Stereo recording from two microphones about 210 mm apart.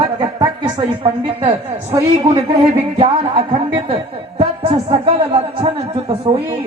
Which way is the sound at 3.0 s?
25° right (ahead or behind).